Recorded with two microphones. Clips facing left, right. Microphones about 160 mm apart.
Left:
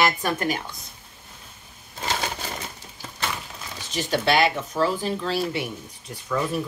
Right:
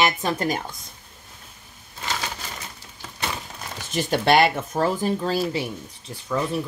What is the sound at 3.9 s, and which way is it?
Speech, 55° right (ahead or behind).